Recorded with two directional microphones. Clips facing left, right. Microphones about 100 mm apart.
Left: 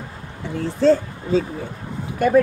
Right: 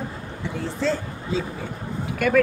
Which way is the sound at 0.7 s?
45° left (ahead or behind).